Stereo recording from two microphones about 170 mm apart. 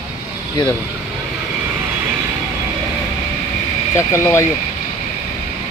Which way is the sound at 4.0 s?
15° left (ahead or behind).